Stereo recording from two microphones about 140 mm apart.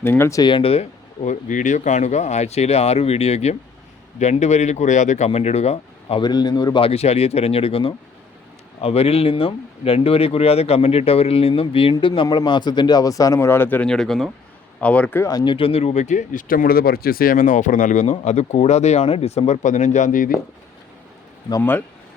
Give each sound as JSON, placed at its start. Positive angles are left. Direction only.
{"t": 0.0, "sound": "speech", "side_deg": 15}
{"t": 0.5, "sound": "speech", "side_deg": 45}
{"t": 6.2, "sound": "speech", "side_deg": 30}
{"t": 15.3, "sound": "speech", "side_deg": 30}
{"t": 21.6, "sound": "speech", "side_deg": 15}